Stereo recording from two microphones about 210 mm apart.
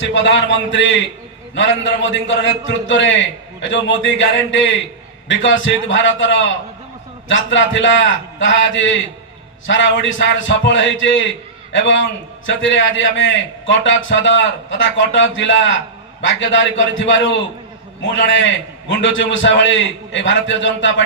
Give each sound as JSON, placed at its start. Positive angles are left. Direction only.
{"t": 0.0, "sound": "a man's voice", "side_deg": 65}